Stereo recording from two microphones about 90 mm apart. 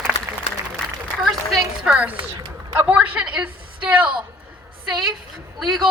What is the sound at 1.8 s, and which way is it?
A woman's voice, 10° right (ahead or behind).